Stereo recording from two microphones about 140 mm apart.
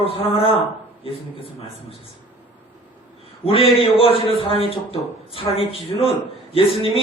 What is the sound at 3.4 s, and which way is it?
A man's voice, 40° left (ahead or behind).